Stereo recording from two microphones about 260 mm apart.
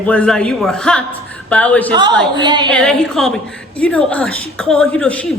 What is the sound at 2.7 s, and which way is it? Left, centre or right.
A man's voice, centre.